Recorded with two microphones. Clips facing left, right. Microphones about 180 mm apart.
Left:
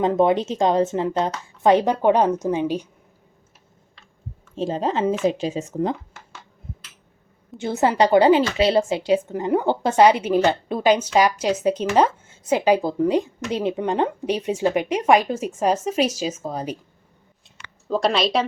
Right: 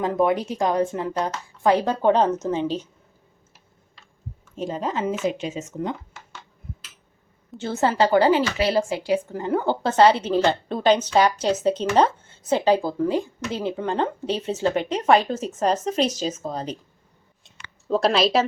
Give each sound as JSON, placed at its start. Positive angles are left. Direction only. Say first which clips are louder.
{"t": 0.0, "sound": "a woman's voice", "louder": "left 3 dB", "side_deg": 25}
{"t": 4.5, "sound": "speech", "louder": "left 4 dB", "side_deg": 30}
{"t": 7.6, "sound": "a woman's voice", "louder": "left 2 dB", "side_deg": 15}
{"t": 17.8, "sound": "speech", "louder": "right 1 dB", "side_deg": 0}